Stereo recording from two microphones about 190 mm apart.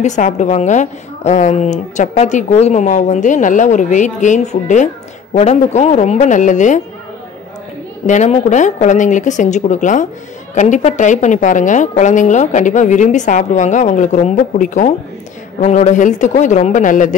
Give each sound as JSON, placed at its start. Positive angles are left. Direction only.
{"t": 0.0, "sound": "a woman's voice", "side_deg": 40}
{"t": 8.1, "sound": "a woman's voice", "side_deg": 40}